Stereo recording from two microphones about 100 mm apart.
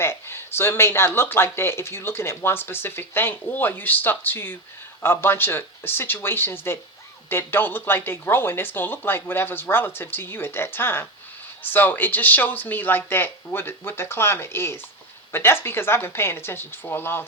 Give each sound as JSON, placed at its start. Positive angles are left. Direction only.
{"t": 0.0, "sound": "speech", "side_deg": 25}